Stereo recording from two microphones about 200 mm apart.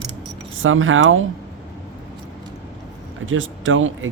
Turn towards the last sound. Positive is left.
turn(degrees=-80)